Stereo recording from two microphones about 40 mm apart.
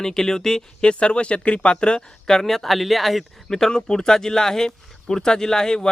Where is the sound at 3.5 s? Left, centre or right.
Centre.